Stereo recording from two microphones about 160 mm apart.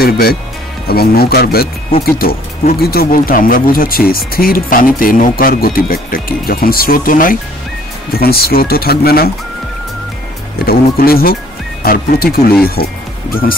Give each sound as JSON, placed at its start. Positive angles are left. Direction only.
{"t": 0.0, "sound": "speech", "side_deg": 70}
{"t": 8.1, "sound": "speech", "side_deg": 70}
{"t": 10.6, "sound": "speech", "side_deg": 70}